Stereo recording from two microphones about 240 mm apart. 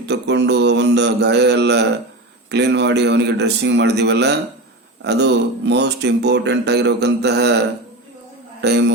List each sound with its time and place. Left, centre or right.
0.1 s speech: right
8.6 s speech: right